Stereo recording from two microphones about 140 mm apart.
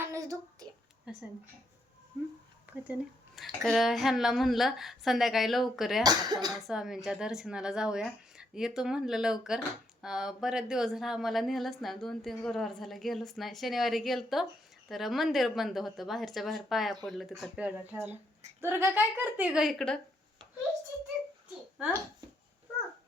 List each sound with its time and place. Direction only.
0.0 s a sound: 20° right (ahead or behind)
2.6 s speech: 10° right (ahead or behind)
3.3 s speech: centre (ahead or behind)
6.0 s speech: 30° right (ahead or behind)
6.5 s a woman's voice: centre (ahead or behind)
19.5 s speech: centre (ahead or behind)
21.8 s speech: 5° right (ahead or behind)